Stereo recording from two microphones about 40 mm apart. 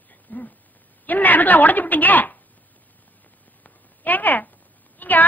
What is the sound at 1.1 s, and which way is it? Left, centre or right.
A man's voice, left.